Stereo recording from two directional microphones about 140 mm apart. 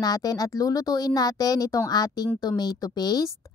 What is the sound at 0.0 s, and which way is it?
A woman's voice, 25° left (ahead or behind).